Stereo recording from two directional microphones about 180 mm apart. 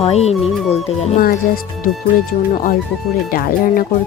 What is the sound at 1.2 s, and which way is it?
Speech, 55° left (ahead or behind).